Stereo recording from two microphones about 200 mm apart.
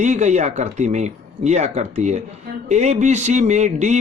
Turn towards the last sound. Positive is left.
turn(degrees=-35)  # may be behind; listen again after turning